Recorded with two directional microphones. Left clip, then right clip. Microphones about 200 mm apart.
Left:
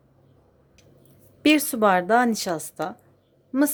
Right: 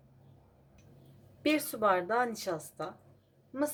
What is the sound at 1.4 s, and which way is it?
Speech, 50° left (ahead or behind).